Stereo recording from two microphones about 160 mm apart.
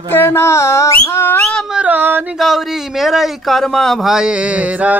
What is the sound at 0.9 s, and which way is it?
Whistle, 15° left (ahead or behind).